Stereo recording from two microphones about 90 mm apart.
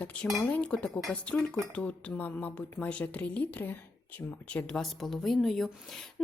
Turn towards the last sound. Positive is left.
turn(degrees=5)  # may be behind; listen again after turning